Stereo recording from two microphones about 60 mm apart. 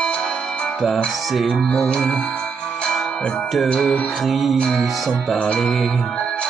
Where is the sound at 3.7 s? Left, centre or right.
Centre.